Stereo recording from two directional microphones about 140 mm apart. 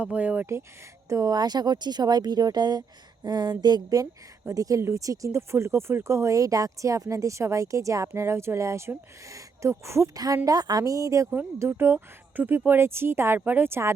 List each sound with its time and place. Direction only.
0.0 s a woman's voice: 10° right (ahead or behind)